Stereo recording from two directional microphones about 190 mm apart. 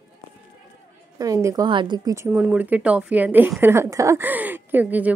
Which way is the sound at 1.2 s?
15° right (ahead or behind).